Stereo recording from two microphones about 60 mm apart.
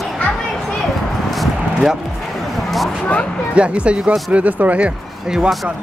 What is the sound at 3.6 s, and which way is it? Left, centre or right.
Speech, centre.